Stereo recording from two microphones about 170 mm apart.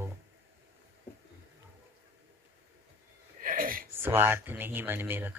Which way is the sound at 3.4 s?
55° right (ahead or behind).